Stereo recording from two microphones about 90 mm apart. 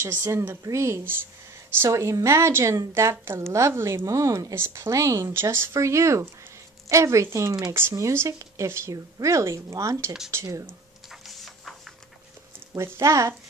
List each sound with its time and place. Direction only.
0.0 s a woman's voice: 30° right (ahead or behind)
11.1 s printer: centre (ahead or behind)
12.7 s a woman's voice: 30° right (ahead or behind)